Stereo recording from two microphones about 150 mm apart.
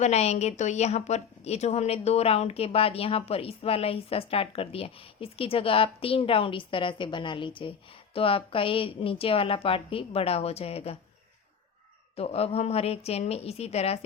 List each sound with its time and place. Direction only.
0.0 s a woman's voice: 45° left (ahead or behind)
12.1 s a woman's voice: 45° left (ahead or behind)